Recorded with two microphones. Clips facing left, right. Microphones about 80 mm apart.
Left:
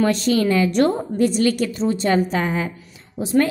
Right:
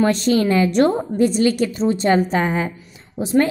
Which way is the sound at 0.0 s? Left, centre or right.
Right.